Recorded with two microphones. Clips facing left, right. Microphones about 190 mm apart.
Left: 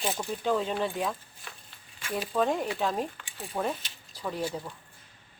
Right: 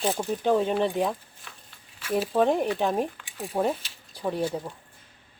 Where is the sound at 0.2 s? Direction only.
20° right (ahead or behind).